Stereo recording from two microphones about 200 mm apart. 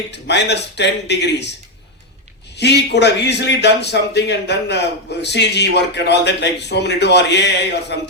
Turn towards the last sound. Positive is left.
turn(degrees=60)  # may be behind; listen again after turning